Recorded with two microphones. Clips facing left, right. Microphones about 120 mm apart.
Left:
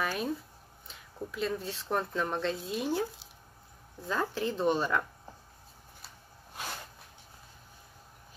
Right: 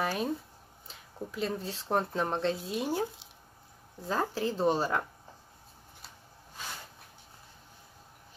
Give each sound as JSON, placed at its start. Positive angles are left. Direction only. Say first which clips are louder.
{"t": 0.0, "sound": "speech", "louder": "right 1 dB", "side_deg": -35}
{"t": 2.5, "sound": "speech", "louder": "even", "side_deg": -15}
{"t": 4.1, "sound": "speech", "louder": "right 1 dB", "side_deg": -35}